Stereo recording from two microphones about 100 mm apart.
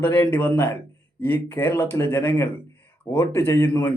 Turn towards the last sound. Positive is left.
turn(degrees=20)  # may be behind; listen again after turning